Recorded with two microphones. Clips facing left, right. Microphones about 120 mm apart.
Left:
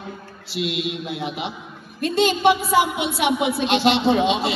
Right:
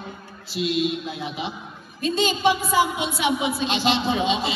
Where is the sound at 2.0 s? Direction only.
65° left (ahead or behind).